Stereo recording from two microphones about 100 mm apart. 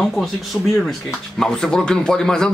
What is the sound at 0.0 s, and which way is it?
Speech, centre (ahead or behind).